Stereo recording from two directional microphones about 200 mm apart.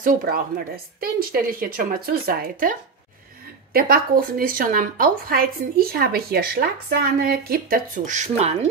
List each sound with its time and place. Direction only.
0.0 s a woman's voice: 45° right (ahead or behind)